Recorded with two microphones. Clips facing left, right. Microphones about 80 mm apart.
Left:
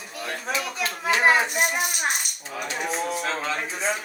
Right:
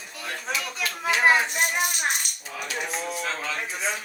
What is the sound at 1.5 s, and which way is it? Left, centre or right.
Rattle, centre.